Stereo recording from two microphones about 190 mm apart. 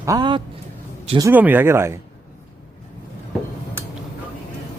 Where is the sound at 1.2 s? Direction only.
10° right (ahead or behind).